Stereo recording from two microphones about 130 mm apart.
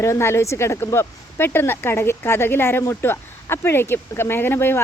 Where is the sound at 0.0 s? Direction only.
20° left (ahead or behind).